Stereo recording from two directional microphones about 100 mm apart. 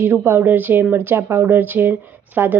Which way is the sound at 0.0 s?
25° right (ahead or behind).